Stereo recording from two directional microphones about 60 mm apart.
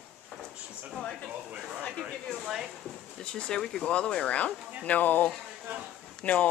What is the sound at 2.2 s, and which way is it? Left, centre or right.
Speech, centre.